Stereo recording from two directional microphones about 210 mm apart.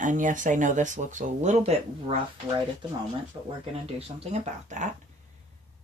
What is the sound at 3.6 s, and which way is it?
Speech, 30° right (ahead or behind).